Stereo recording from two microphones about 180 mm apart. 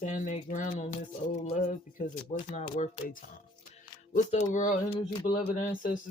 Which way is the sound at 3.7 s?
40° left (ahead or behind).